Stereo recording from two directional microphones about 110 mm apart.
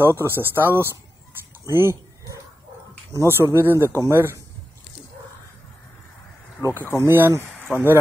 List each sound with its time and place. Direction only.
0.0 s speech: 20° right (ahead or behind)
1.7 s a sound: 25° right (ahead or behind)
3.1 s speech: 25° right (ahead or behind)
7.0 s speech: 20° right (ahead or behind)
7.6 s speech: 15° left (ahead or behind)